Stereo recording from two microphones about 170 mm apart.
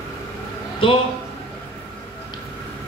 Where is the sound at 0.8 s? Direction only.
30° left (ahead or behind).